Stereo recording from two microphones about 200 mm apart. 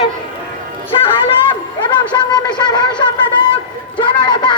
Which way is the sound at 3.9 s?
25° left (ahead or behind).